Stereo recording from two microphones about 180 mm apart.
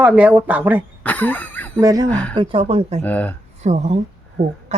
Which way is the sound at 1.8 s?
20° right (ahead or behind).